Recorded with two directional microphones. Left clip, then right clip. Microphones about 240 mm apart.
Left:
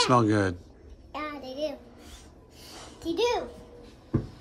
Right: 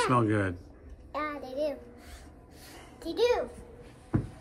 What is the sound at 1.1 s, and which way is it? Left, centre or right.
Child singing, centre.